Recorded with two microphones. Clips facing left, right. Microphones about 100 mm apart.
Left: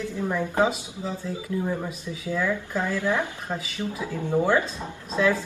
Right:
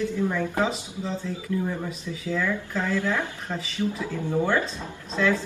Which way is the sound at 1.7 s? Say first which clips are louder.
Left 1 dB; 15° left (ahead or behind).